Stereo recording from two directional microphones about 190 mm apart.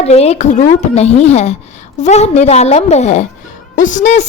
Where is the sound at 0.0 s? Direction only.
35° left (ahead or behind).